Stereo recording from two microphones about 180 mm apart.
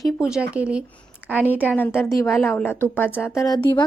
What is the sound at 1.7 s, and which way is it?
A woman's voice, 10° left (ahead or behind).